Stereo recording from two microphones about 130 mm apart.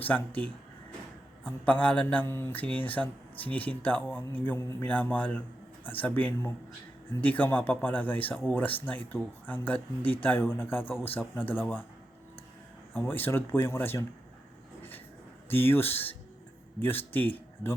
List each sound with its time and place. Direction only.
0.0 s speech: 10° left (ahead or behind)
12.9 s speech: 10° left (ahead or behind)
15.4 s speech: 15° left (ahead or behind)